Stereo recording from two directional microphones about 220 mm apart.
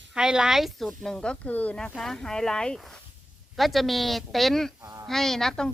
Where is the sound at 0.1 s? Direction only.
5° right (ahead or behind).